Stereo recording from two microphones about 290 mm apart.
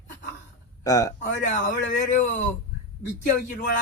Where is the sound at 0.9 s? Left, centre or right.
Centre.